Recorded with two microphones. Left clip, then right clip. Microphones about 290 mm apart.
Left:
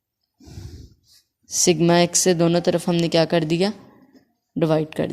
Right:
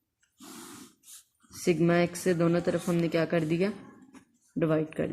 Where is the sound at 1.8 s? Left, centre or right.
Left.